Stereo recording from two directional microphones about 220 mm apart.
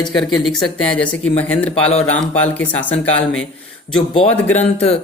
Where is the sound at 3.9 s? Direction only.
25° left (ahead or behind).